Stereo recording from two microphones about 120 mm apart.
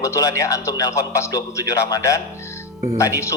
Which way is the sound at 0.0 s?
30° left (ahead or behind).